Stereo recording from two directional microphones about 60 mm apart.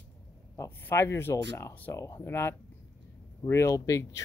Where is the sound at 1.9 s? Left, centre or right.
Left.